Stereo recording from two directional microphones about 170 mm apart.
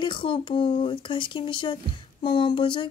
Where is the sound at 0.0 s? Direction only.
30° left (ahead or behind).